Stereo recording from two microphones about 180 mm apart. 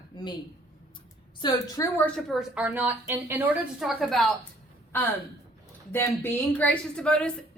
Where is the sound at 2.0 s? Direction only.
5° left (ahead or behind).